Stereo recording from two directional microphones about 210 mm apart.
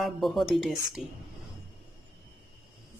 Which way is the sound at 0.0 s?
Centre (ahead or behind).